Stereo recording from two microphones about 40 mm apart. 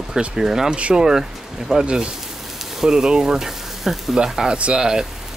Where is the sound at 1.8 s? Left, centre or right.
Right; by 4.0 s centre.